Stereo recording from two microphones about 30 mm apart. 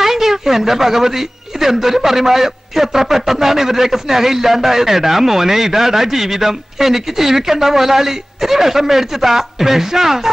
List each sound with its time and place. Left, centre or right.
0.0 s speech: centre